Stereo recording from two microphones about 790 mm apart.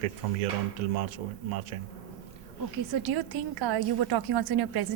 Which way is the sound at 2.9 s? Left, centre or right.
Right.